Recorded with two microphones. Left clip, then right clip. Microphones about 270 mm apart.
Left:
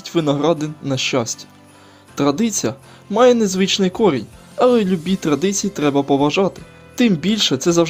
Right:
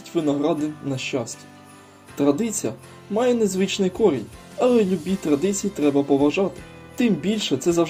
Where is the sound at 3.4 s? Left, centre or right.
Left.